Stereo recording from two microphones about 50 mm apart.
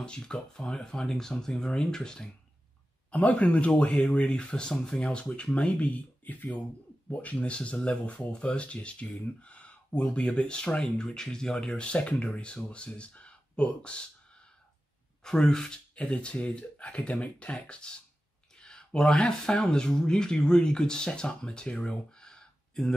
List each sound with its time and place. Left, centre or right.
0.0 s speech: centre
3.1 s speech: left
15.2 s speech: centre
18.6 s a sound: centre
19.2 s speech: centre